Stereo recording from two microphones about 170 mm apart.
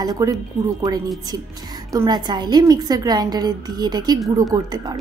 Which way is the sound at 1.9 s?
20° right (ahead or behind).